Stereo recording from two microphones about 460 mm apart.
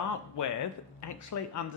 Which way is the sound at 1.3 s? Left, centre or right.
Left.